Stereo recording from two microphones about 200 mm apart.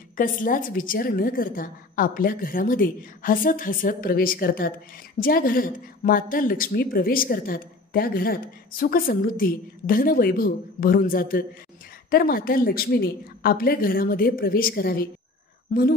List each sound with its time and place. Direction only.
0.2 s a woman's voice: 45° left (ahead or behind)